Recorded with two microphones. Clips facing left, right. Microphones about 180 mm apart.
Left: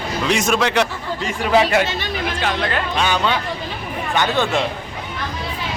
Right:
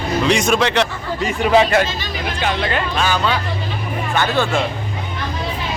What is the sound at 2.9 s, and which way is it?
Speech, 20° left (ahead or behind).